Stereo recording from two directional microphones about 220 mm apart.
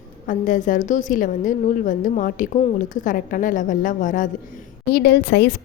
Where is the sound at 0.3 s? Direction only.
35° left (ahead or behind).